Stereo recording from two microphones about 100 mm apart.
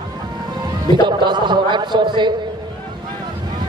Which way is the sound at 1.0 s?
50° right (ahead or behind).